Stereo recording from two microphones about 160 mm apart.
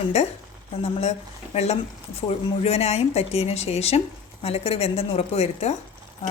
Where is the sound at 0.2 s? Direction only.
40° left (ahead or behind).